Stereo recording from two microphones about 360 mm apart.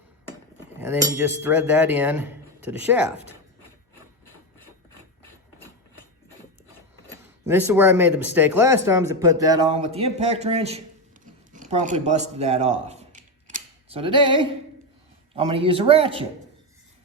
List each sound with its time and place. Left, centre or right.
0.8 s speech: centre
7.4 s speech: centre
11.5 s a sound: right
15.4 s speech: centre